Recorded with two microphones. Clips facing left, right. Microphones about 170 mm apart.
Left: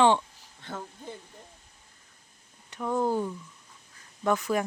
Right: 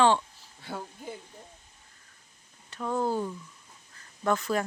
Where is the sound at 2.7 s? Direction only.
15° left (ahead or behind).